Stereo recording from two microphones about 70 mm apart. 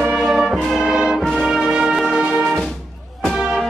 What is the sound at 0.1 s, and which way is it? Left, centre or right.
Brass instrument, centre.